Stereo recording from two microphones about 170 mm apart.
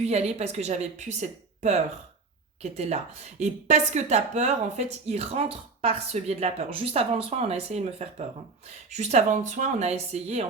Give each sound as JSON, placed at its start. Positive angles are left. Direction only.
{"t": 0.0, "sound": "a woman's voice", "side_deg": -40}